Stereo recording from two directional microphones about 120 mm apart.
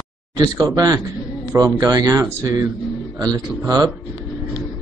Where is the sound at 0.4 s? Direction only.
35° right (ahead or behind).